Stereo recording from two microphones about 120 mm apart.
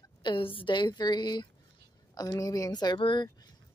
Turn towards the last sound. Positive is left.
turn(degrees=35)  # may be behind; listen again after turning